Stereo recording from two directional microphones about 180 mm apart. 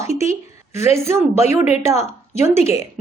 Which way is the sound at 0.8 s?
15° right (ahead or behind).